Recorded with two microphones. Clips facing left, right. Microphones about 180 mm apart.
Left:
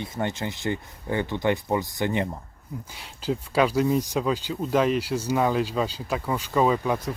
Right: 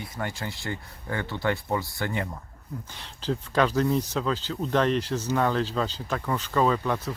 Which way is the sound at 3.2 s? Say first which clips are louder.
Left 2 dB; 10° left (ahead or behind).